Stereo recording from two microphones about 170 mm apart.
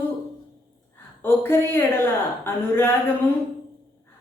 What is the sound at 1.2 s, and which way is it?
Speech, 15° left (ahead or behind).